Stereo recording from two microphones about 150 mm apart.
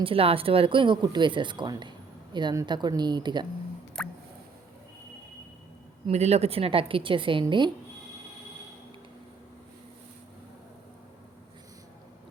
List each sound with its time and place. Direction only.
0.0 s a woman's voice: 40° right (ahead or behind)
4.0 s a sound: 5° left (ahead or behind)
6.1 s speech: 45° right (ahead or behind)